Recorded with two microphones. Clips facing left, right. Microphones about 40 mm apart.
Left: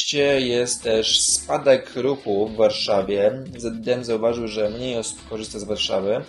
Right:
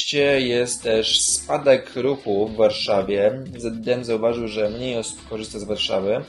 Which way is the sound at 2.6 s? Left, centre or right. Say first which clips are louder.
Even; centre.